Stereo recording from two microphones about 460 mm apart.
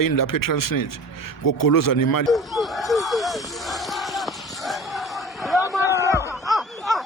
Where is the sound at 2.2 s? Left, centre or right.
Centre.